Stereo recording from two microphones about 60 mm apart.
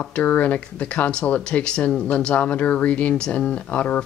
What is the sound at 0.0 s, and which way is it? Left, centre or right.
Speech, centre.